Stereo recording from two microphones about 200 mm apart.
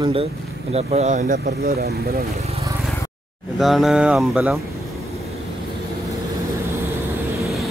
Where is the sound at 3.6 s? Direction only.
Centre (ahead or behind).